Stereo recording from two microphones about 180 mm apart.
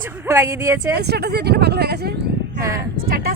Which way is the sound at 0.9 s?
65° right (ahead or behind).